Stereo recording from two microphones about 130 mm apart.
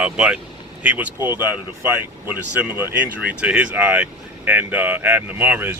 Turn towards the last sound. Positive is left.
turn(degrees=-15)  # may be behind; listen again after turning